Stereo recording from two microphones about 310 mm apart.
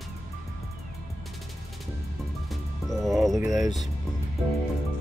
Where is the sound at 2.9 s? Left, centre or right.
Centre.